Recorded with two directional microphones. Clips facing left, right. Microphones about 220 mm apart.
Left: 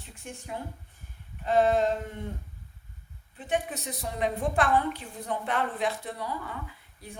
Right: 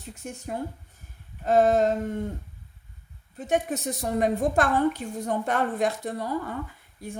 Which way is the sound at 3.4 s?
45° right (ahead or behind).